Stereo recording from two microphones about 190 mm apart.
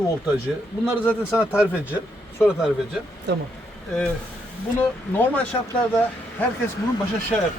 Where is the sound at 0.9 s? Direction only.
5° right (ahead or behind).